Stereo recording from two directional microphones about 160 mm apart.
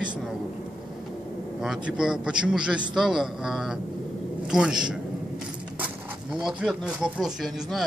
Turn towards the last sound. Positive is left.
turn(degrees=0)  # may be behind; listen again after turning